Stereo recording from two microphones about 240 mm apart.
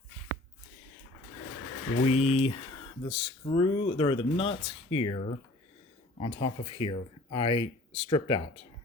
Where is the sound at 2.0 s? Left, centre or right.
Left.